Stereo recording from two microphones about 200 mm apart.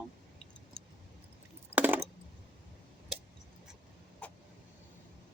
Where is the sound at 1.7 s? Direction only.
10° right (ahead or behind).